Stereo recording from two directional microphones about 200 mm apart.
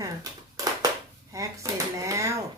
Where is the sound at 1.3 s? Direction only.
15° right (ahead or behind).